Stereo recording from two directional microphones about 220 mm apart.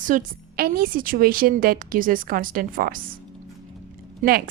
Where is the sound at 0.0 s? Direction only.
35° right (ahead or behind).